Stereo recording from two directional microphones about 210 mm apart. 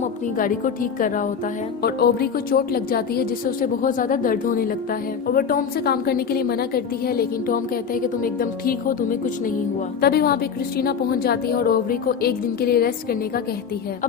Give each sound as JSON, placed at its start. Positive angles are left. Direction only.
{"t": 0.3, "sound": "a woman's voice", "side_deg": 40}